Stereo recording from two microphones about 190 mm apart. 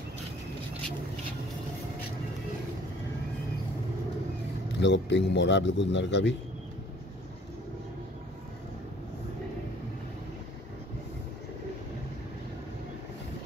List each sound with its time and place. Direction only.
4.7 s speech: 70° left (ahead or behind)